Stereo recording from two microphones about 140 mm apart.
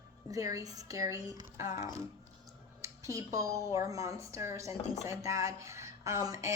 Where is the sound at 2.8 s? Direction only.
20° right (ahead or behind).